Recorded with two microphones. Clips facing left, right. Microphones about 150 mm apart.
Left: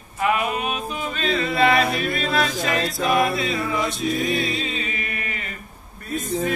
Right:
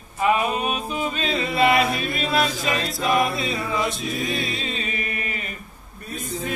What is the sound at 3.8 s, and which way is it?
Music, centre (ahead or behind).